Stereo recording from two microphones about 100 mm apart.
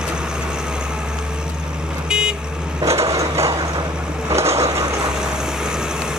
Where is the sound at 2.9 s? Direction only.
30° right (ahead or behind).